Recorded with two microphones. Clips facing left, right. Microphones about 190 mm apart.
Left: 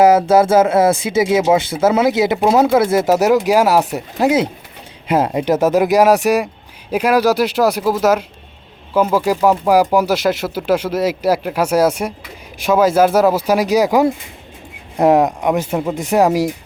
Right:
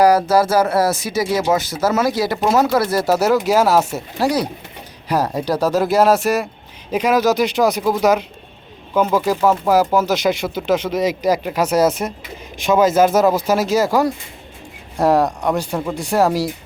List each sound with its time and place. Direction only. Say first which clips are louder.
0.0 s speech: left 3 dB; 25° left (ahead or behind)
2.6 s speech: left 4 dB; 25° left (ahead or behind)